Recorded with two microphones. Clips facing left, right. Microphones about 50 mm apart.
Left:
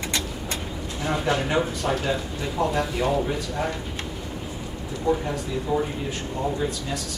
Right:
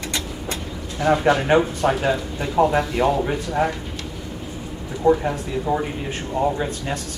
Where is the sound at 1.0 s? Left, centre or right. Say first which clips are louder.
Right 7 dB; right.